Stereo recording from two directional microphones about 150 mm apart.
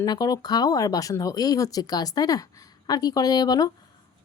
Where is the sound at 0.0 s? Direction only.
25° left (ahead or behind).